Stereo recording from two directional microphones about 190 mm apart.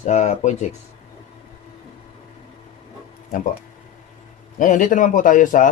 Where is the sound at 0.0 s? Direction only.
40° left (ahead or behind).